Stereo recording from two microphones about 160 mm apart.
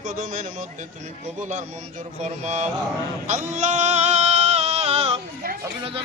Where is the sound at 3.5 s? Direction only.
45° right (ahead or behind).